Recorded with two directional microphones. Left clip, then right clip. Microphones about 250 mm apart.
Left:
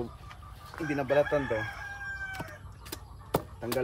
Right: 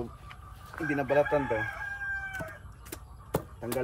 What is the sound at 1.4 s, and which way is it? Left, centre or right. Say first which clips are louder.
Chicken: right 1 dB; right.